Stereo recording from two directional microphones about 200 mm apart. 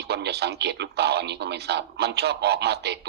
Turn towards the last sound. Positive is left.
turn(degrees=-55)  # may be behind; listen again after turning